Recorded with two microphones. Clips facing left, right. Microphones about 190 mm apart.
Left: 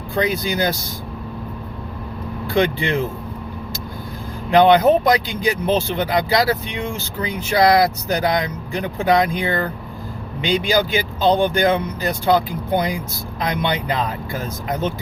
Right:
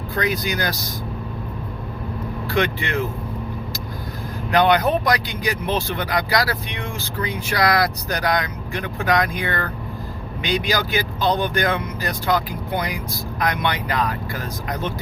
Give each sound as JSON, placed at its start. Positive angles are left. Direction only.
{"t": 0.1, "sound": "speech", "side_deg": 25}
{"t": 2.6, "sound": "speech", "side_deg": 30}
{"t": 4.5, "sound": "speech", "side_deg": 25}